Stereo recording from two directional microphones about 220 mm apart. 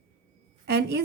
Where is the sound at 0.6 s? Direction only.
50° right (ahead or behind).